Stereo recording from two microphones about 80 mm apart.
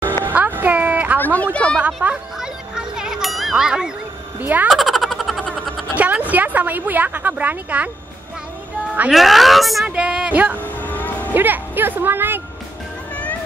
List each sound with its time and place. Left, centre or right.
0.2 s music: right
1.2 s a woman's voice: centre
2.0 s speech: centre
2.3 s music: centre
4.4 s speech: right
4.6 s a sound: centre
5.9 s a woman's voice: centre
9.1 s a woman's voice: centre
9.8 s speech: centre
10.6 s music: left
11.3 s speech: right
13.1 s music: centre